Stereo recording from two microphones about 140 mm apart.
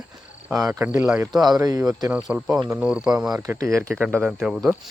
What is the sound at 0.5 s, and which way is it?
Speech, 20° right (ahead or behind).